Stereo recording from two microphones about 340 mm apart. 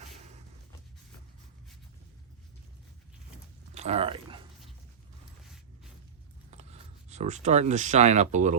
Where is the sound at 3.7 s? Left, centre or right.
Centre.